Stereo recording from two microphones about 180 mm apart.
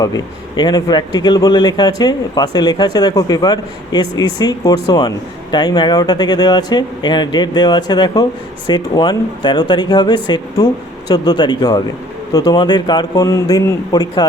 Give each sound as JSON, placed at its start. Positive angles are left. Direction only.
{"t": 0.0, "sound": "speech", "side_deg": 20}